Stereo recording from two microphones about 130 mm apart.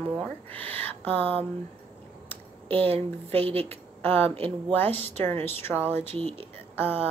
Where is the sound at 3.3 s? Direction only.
50° right (ahead or behind).